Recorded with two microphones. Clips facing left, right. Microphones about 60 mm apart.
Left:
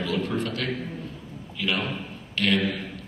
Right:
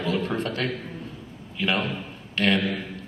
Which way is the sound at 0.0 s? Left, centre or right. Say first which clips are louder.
Right 1 dB; right.